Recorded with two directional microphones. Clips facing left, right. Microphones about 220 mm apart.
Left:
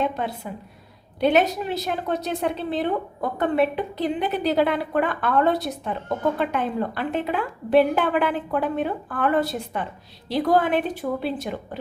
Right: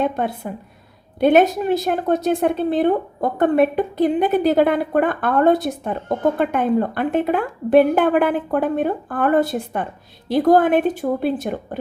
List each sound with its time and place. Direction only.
0.0 s a woman's voice: 50° right (ahead or behind)